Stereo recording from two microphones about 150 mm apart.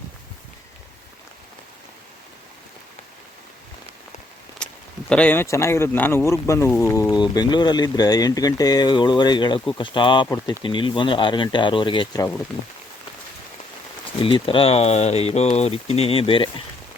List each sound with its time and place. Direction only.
4.6 s speech: 5° left (ahead or behind); by 12.2 s 35° left (ahead or behind)
14.2 s speech: 35° left (ahead or behind)